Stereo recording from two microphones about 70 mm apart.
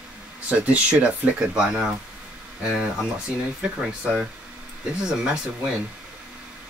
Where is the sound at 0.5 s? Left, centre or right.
Centre.